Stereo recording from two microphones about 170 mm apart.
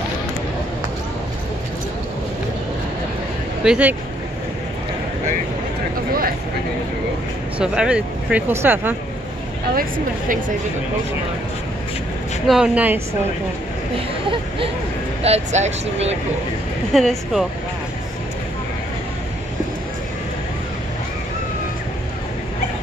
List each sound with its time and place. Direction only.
3.6 s speech: 5° right (ahead or behind)
7.5 s speech: 5° right (ahead or behind)
9.8 s a woman's voice: 55° right (ahead or behind)
12.4 s speech: 5° right (ahead or behind)
15.2 s speech: 40° right (ahead or behind)
16.9 s speech: centre (ahead or behind)